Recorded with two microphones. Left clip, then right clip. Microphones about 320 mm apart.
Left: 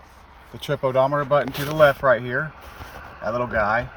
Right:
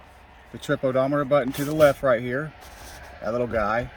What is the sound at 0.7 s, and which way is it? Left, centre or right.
Speech, left.